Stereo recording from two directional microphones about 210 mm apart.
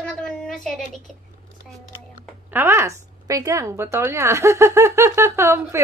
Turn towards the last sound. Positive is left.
turn(degrees=-10)  # may be behind; listen again after turning